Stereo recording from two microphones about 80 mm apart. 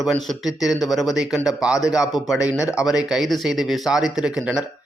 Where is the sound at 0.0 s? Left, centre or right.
Centre.